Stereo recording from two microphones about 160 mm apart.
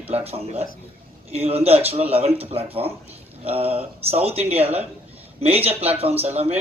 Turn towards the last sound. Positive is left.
turn(degrees=-40)  # may be behind; listen again after turning